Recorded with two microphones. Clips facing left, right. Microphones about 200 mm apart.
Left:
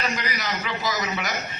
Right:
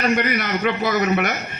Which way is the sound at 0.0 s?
60° right (ahead or behind).